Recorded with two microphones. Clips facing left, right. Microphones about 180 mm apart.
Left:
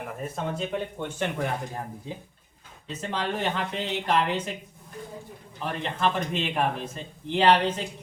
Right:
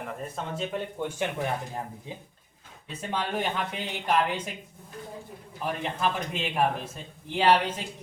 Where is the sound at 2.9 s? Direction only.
10° right (ahead or behind).